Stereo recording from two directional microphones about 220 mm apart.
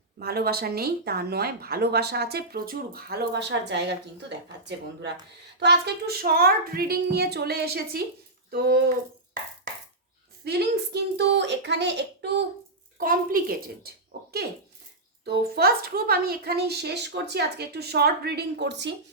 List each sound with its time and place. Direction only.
0.2 s speech: 45° right (ahead or behind)
10.4 s speech: 45° right (ahead or behind)
13.0 s a child's voice: 40° right (ahead or behind)